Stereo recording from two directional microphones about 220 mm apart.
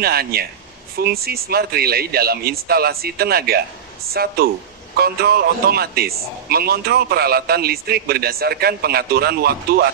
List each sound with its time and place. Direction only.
0.0 s a man's voice: 45° right (ahead or behind)